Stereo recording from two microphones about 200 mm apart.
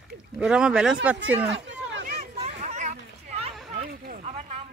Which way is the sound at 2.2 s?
35° right (ahead or behind).